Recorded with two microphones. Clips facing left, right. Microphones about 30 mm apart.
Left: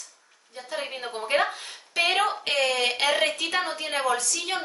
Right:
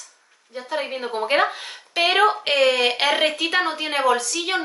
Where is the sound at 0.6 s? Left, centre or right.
Right.